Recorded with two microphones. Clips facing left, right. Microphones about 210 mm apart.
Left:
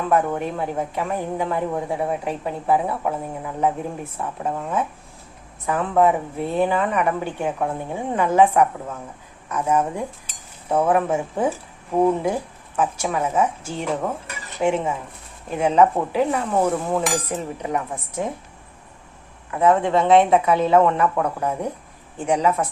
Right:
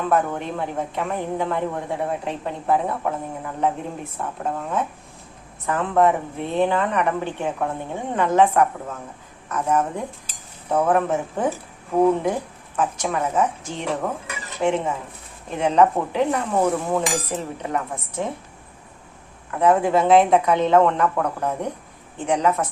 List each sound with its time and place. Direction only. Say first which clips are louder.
0.1 s a woman's voice: left 3 dB; 10° left (ahead or behind)
19.5 s a woman's voice: even; centre (ahead or behind)